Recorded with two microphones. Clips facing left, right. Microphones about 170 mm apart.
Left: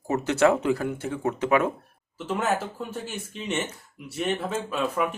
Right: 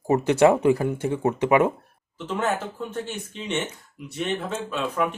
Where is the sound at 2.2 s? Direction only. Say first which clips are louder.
Even; 5° left (ahead or behind).